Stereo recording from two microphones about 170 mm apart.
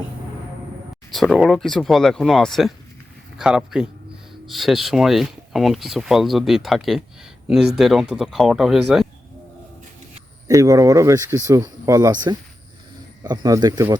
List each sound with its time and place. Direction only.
1.1 s speech: centre (ahead or behind)
10.5 s speech: 20° right (ahead or behind)